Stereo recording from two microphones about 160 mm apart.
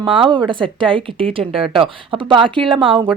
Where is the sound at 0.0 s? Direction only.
30° right (ahead or behind).